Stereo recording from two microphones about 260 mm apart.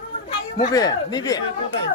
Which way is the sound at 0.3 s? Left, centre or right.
Centre.